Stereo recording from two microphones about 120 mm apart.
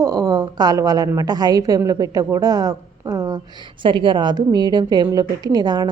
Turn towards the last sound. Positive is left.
turn(degrees=-35)  # may be behind; listen again after turning